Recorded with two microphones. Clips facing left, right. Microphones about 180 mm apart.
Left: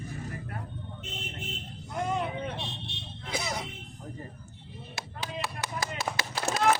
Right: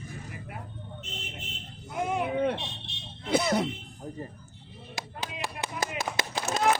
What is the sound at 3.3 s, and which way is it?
Music, 60° right (ahead or behind).